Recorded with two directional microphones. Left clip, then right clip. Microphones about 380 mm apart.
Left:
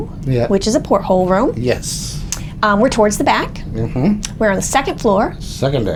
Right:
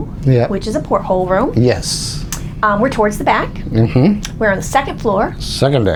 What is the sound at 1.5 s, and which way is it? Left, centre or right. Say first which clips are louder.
Speech: right 4 dB; right.